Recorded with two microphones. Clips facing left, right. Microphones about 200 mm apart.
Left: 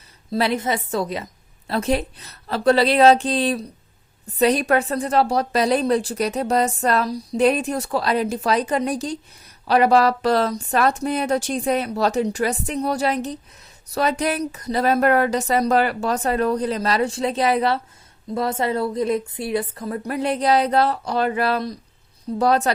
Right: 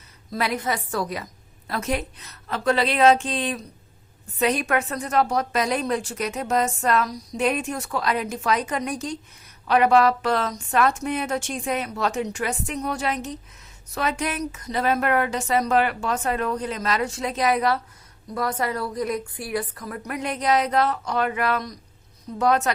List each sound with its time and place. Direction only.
0.3 s a woman's voice: 30° left (ahead or behind)